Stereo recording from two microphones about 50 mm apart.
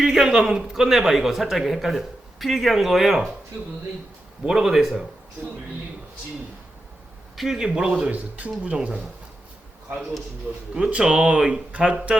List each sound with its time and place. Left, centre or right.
0.0 s a man's voice: centre
4.4 s a man's voice: centre
7.3 s a man's voice: centre
8.1 s speech: right
10.8 s speech: centre